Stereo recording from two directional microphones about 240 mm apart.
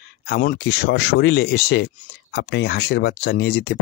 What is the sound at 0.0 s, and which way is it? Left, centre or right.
Speech, left.